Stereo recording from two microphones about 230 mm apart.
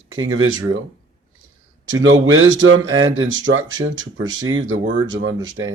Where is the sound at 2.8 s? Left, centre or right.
Centre.